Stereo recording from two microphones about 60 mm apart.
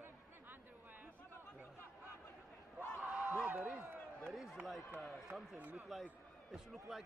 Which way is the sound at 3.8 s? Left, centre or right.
Right.